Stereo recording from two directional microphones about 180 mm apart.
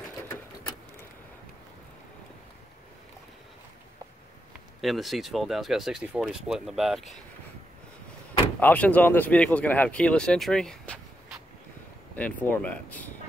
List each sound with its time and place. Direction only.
4.8 s speech: centre (ahead or behind)
8.5 s speech: 10° left (ahead or behind)
12.2 s speech: 10° left (ahead or behind)